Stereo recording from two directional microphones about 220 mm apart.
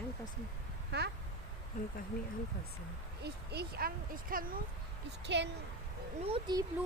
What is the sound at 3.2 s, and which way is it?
Speech, 45° right (ahead or behind).